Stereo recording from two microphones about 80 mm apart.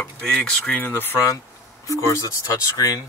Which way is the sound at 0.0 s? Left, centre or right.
Centre.